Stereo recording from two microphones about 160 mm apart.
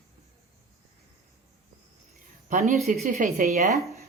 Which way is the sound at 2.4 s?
50° right (ahead or behind).